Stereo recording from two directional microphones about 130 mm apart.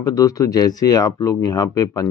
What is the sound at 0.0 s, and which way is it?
Speech, 25° left (ahead or behind).